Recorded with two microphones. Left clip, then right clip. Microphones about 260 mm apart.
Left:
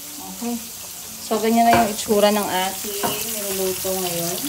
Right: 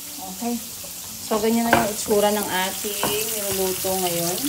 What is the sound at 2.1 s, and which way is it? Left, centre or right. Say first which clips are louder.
Frying: left 2 dB; left.